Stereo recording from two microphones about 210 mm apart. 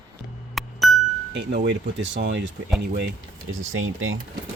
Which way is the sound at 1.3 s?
55° right (ahead or behind).